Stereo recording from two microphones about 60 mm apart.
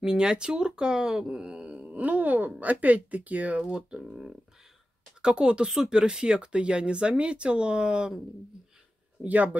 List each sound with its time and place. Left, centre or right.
0.0 s speech: centre
1.7 s a sound: centre
2.6 s speech: right
4.0 s speech: centre
9.2 s speech: right